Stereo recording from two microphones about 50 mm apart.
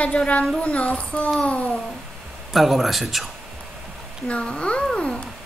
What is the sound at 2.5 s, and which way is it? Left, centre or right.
Speech, centre.